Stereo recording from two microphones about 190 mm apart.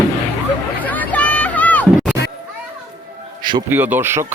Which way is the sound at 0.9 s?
10° left (ahead or behind).